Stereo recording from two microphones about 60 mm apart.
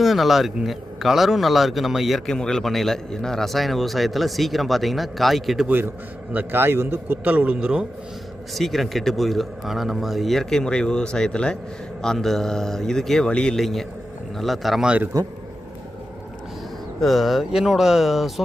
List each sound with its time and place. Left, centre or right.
0.0 s a man's voice: centre
2.2 s a man's voice: centre
6.3 s a man's voice: right
7.3 s speech: right
8.5 s a man's voice: centre
13.6 s a man's voice: centre
15.1 s a man's voice: right
17.0 s a man's voice: centre